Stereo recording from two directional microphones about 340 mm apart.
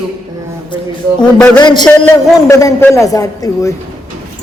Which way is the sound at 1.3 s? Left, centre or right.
Centre.